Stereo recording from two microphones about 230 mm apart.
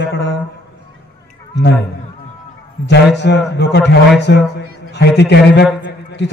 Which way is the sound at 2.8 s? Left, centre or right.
Left.